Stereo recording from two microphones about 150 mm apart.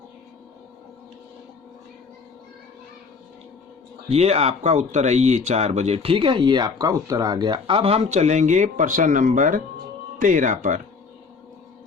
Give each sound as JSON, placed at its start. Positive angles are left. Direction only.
{"t": 4.1, "sound": "speech", "side_deg": -45}